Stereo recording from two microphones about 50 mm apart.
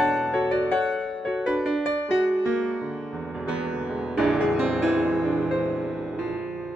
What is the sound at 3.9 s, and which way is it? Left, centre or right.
Music, centre.